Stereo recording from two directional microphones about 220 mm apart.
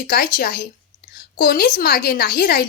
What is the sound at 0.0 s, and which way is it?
A woman's voice, 40° left (ahead or behind).